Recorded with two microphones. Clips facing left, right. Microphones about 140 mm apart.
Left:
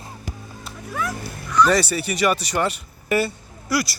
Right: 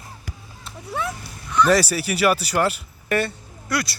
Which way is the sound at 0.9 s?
25° right (ahead or behind).